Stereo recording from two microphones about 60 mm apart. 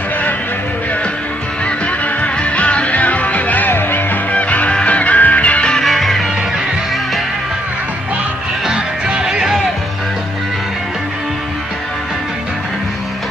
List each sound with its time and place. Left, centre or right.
1.9 s music: left
4.3 s music: left
5.9 s music: centre
8.6 s music: centre